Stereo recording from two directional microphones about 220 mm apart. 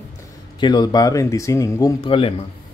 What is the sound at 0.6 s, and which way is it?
Speech, 20° left (ahead or behind).